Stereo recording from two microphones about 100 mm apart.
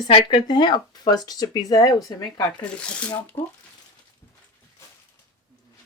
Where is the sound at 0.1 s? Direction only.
55° left (ahead or behind); by 2.2 s 35° left (ahead or behind).